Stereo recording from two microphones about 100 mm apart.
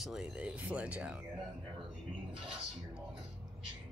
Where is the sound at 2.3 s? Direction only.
5° right (ahead or behind).